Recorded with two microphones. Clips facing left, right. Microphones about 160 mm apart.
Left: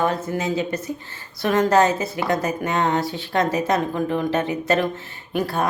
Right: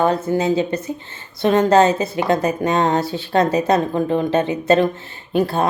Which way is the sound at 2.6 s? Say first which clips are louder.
Right 4 dB; 30° right (ahead or behind).